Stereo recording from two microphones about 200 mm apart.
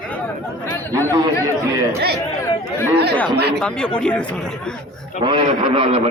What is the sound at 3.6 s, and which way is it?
Speech, 5° left (ahead or behind).